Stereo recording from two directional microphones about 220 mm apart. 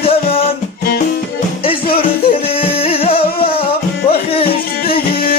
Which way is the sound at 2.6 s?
25° left (ahead or behind).